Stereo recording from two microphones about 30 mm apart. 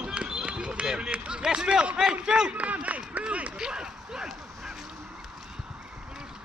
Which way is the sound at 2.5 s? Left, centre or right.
Right.